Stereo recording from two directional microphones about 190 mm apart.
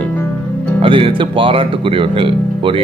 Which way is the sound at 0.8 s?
30° right (ahead or behind).